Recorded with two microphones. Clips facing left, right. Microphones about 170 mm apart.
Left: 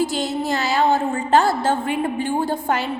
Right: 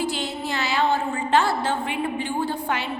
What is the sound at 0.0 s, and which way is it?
A woman's voice, 40° left (ahead or behind).